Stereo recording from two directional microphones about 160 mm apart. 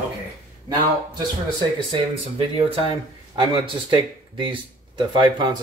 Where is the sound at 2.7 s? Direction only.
30° right (ahead or behind).